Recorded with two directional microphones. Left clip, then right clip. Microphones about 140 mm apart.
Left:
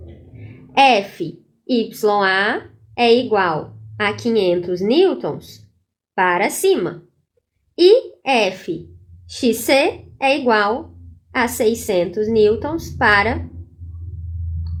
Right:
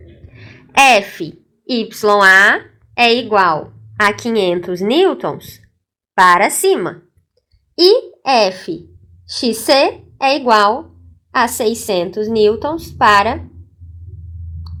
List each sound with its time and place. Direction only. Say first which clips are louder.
0.3 s a woman's voice: right 3 dB; 35° right (ahead or behind)